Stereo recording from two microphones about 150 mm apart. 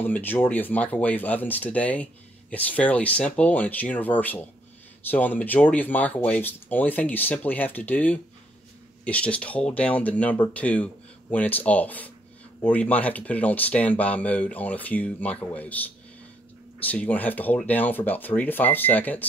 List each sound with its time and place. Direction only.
0.0 s speech: 15° left (ahead or behind)